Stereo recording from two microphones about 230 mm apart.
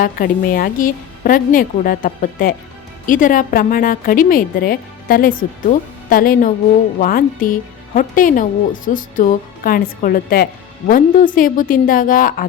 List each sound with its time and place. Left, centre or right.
0.0 s speech: left